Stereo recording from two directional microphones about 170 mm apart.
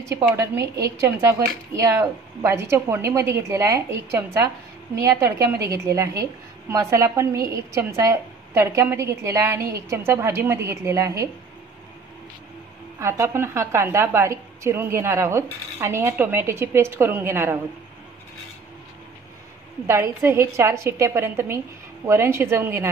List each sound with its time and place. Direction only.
0.1 s a woman's voice: 15° right (ahead or behind)
13.0 s a woman's voice: 15° right (ahead or behind)
19.9 s a woman's voice: 15° right (ahead or behind)